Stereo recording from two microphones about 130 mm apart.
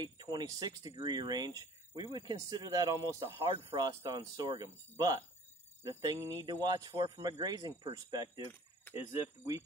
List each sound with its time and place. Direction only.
0.0 s speech: 30° right (ahead or behind)
6.1 s speech: 20° right (ahead or behind)
6.4 s speech: 35° right (ahead or behind)